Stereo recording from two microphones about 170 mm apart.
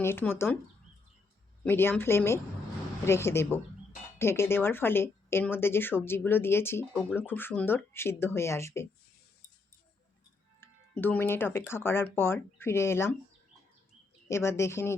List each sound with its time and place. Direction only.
0.0 s speech: 15° left (ahead or behind)
1.6 s speech: 15° left (ahead or behind)
10.6 s speech: 10° left (ahead or behind)
14.3 s speech: 15° left (ahead or behind)